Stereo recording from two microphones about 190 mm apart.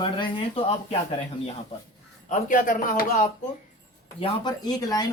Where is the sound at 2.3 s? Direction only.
45° left (ahead or behind).